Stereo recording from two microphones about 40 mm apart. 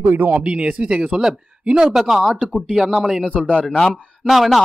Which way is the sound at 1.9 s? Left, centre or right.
Centre.